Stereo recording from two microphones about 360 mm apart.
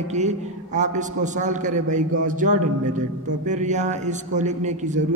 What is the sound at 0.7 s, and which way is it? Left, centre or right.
A man's voice, centre.